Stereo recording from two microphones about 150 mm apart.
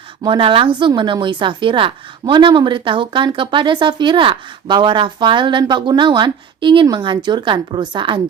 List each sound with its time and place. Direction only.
0.2 s a woman's voice: 35° right (ahead or behind)